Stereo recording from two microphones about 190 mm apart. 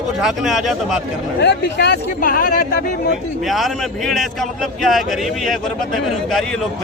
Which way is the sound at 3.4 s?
Centre (ahead or behind).